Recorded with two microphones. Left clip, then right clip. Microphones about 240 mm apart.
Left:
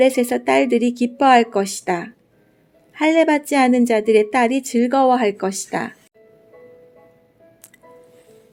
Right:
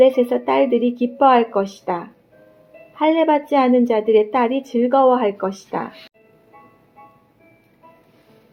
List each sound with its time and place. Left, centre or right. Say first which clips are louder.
0.0 s a woman's voice: right 2 dB; left